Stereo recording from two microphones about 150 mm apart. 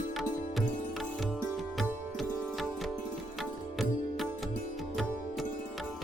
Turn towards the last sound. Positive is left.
turn(degrees=0)  # may be behind; listen again after turning